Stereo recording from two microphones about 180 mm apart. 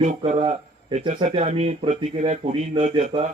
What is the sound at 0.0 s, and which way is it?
A man's voice, 35° right (ahead or behind).